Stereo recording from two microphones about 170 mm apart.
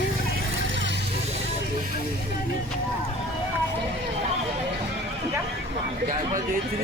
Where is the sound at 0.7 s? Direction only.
90° right.